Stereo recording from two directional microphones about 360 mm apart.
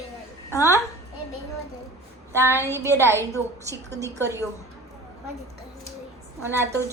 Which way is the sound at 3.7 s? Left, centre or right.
Centre.